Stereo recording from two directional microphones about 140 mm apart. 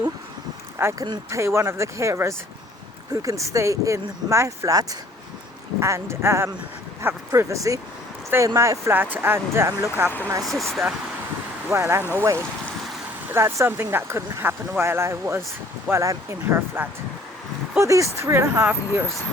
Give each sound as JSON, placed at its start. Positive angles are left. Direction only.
{"t": 0.8, "sound": "speech", "side_deg": -20}
{"t": 1.0, "sound": "speech", "side_deg": -30}
{"t": 1.4, "sound": "speech", "side_deg": -20}
{"t": 10.4, "sound": "speech", "side_deg": 0}
{"t": 11.7, "sound": "speech", "side_deg": -15}